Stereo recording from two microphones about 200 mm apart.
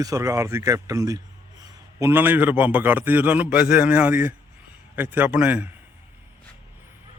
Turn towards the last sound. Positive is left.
turn(degrees=-5)  # may be behind; listen again after turning